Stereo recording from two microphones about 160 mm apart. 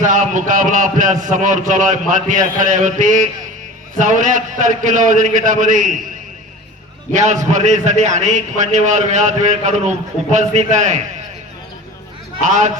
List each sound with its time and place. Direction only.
0.0 s a man's voice: 55° right (ahead or behind)
7.1 s a man's voice: 50° right (ahead or behind)
12.4 s a man's voice: 50° right (ahead or behind)